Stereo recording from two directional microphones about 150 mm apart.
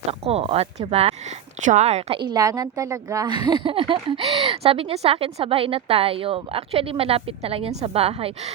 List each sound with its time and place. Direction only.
0.1 s a woman's voice: 40° right (ahead or behind)